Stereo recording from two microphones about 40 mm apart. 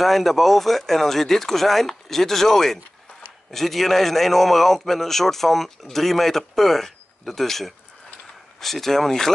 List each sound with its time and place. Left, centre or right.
0.0 s a man's voice: centre